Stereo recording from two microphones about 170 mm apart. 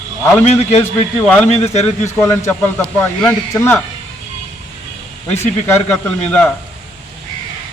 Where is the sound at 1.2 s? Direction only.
10° left (ahead or behind).